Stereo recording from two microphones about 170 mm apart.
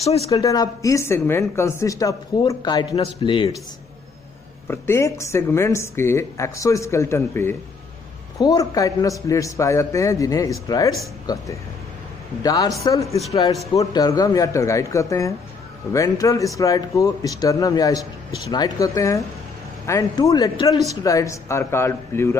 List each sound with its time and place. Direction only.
0.3 s a man's voice: 20° left (ahead or behind)
4.6 s a woman's voice: 15° left (ahead or behind)
12.4 s a woman's voice: 20° left (ahead or behind)